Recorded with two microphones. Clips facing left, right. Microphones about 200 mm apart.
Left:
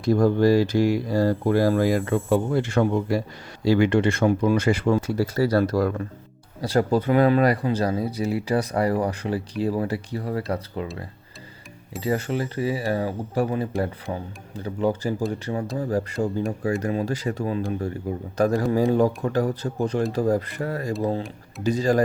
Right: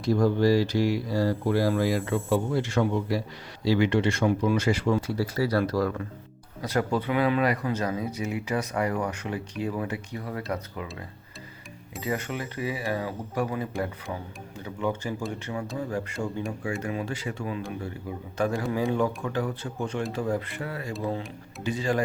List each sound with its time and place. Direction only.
0.0 s speech: 50° left (ahead or behind)
6.6 s speech: 35° left (ahead or behind)
11.9 s speech: 35° left (ahead or behind)